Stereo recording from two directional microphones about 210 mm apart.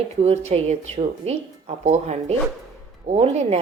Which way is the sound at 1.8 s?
30° right (ahead or behind).